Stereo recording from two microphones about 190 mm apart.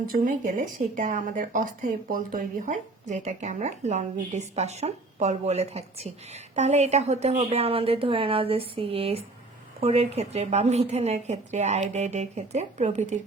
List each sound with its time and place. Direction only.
0.1 s speech: 45° right (ahead or behind)